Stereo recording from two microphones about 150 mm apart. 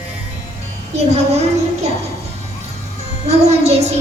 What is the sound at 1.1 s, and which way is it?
Speech, 45° right (ahead or behind).